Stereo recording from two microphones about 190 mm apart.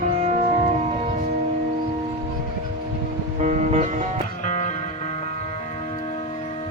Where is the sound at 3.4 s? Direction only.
35° right (ahead or behind).